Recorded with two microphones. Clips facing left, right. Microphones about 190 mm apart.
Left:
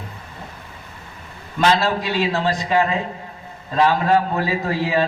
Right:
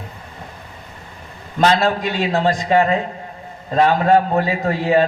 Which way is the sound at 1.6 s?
45° right (ahead or behind).